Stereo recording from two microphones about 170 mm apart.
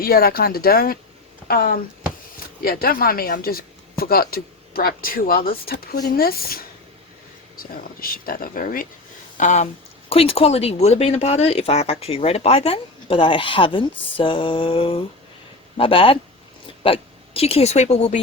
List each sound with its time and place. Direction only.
0.0 s speech: 65° left (ahead or behind); by 9.6 s 45° left (ahead or behind)
10.1 s a woman's voice: 35° left (ahead or behind)